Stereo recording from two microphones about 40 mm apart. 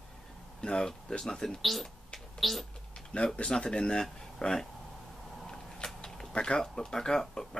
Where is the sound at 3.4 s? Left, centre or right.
Left.